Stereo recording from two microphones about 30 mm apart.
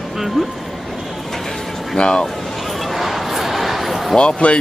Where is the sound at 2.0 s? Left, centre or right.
Left.